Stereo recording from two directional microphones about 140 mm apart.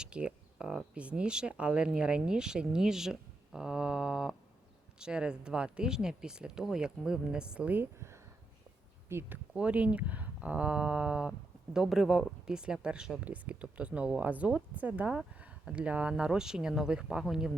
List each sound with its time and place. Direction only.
0.0 s speech: 5° right (ahead or behind)